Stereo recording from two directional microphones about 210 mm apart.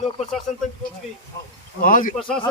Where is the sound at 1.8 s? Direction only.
40° left (ahead or behind).